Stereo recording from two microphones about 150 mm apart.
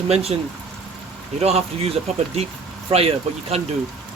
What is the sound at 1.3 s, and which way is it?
Speech, 45° right (ahead or behind).